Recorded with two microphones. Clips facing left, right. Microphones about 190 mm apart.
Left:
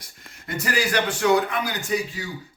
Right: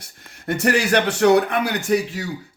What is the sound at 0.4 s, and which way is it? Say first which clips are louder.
A man's voice: right 6 dB; 70° right (ahead or behind).